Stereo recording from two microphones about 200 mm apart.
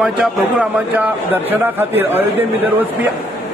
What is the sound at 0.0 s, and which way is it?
A man's voice, 5° right (ahead or behind).